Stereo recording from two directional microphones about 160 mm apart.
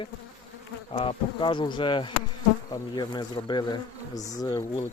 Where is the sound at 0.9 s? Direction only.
30° left (ahead or behind).